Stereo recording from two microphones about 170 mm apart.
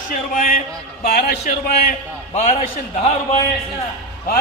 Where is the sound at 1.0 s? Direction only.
65° left (ahead or behind).